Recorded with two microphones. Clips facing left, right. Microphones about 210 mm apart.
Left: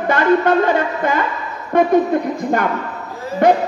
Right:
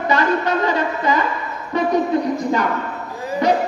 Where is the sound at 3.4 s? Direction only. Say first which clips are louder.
Left 5 dB; 55° left (ahead or behind).